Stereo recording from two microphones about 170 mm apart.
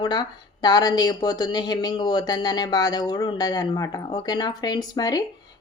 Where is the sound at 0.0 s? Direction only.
25° left (ahead or behind).